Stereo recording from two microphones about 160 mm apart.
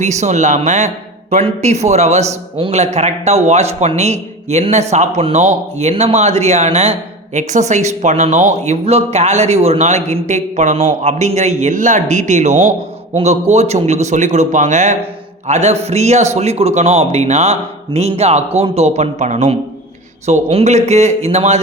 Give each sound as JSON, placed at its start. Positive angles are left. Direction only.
{"t": 0.0, "sound": "a man's voice", "side_deg": -45}